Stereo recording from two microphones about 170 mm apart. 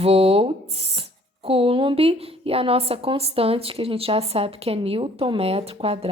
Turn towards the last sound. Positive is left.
turn(degrees=-35)  # may be behind; listen again after turning